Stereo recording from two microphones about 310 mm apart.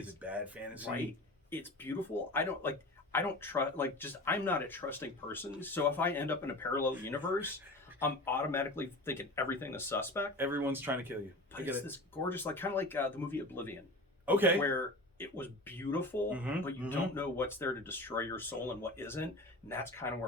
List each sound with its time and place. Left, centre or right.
0.2 s speech: centre
1.5 s speech: centre
10.3 s speech: centre
11.9 s speech: centre
14.3 s speech: centre
14.6 s speech: centre
16.3 s speech: centre
16.9 s speech: centre